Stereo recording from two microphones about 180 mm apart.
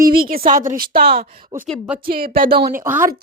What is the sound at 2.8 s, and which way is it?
Speech, 10° right (ahead or behind).